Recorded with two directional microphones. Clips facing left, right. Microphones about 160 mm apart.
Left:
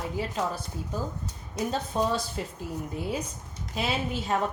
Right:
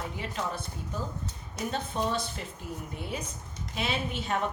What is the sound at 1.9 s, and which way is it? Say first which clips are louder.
Speech: left 4 dB; 35° left (ahead or behind).